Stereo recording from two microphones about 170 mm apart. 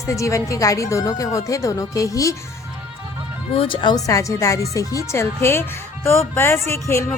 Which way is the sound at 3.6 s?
30° left (ahead or behind).